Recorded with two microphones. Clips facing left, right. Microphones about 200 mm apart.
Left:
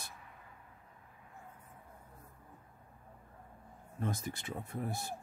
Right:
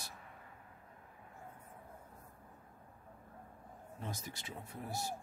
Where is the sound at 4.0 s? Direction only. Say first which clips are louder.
Left 8 dB; 50° left (ahead or behind).